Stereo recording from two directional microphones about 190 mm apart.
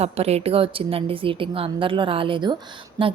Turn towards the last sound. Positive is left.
turn(degrees=-25)  # may be behind; listen again after turning